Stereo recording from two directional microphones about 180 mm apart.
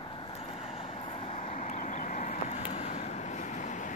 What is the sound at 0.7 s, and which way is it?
Vehicle, 35° left (ahead or behind).